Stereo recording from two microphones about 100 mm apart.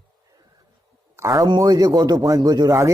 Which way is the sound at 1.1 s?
35° right (ahead or behind).